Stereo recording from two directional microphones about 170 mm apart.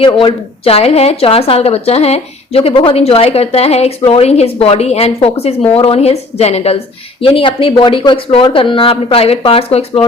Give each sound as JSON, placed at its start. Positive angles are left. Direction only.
{"t": 0.0, "sound": "speech", "side_deg": 30}